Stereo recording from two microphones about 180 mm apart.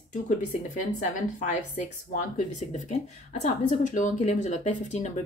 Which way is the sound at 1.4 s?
45° left (ahead or behind).